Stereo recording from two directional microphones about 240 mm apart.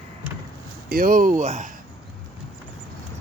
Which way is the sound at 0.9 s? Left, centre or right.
Right.